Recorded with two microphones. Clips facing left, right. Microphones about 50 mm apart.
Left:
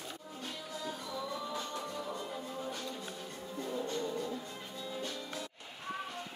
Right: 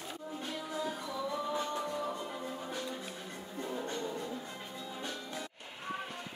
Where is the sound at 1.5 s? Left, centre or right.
Centre.